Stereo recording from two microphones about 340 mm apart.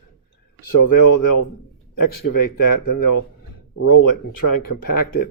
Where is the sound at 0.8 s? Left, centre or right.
Left.